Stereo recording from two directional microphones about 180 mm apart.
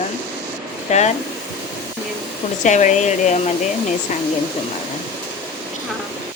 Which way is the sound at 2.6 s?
40° left (ahead or behind).